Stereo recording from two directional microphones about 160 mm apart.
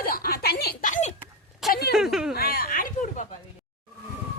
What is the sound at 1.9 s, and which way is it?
Speech, centre (ahead or behind).